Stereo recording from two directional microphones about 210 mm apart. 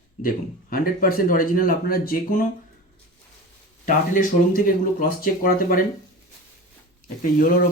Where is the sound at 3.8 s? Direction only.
40° left (ahead or behind).